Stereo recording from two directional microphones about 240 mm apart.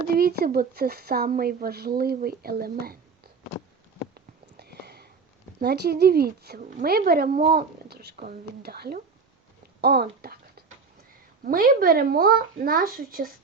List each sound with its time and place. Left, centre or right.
0.1 s speech: right
4.1 s a sound: right
5.5 s speech: right
11.4 s speech: right